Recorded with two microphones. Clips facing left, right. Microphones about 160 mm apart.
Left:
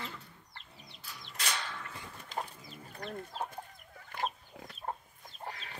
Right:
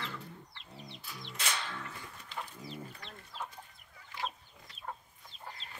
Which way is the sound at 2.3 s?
45° left (ahead or behind).